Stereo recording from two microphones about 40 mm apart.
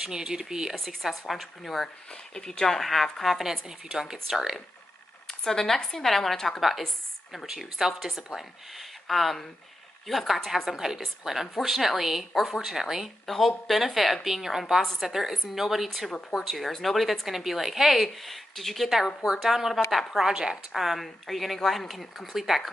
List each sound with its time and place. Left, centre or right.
0.1 s speech: centre
0.7 s a woman's voice: centre
2.3 s a woman's voice: centre
3.6 s speech: centre
5.4 s a woman's voice: centre
7.4 s a woman's voice: centre
13.3 s a woman's voice: centre